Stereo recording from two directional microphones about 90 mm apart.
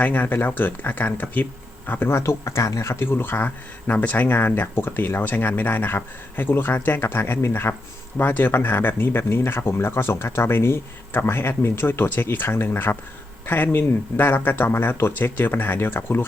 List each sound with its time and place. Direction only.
0.0 s speech: 20° left (ahead or behind)